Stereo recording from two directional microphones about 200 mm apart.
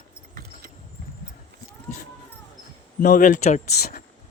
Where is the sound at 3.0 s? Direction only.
40° left (ahead or behind).